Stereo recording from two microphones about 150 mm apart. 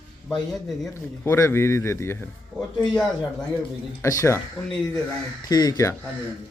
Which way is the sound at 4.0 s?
20° left (ahead or behind).